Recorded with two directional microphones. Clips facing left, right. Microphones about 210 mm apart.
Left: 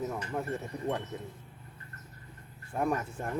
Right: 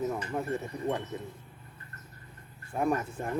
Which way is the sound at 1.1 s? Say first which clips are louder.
Right 2 dB; centre (ahead or behind).